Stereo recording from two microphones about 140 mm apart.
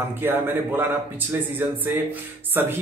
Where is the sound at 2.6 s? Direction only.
15° right (ahead or behind).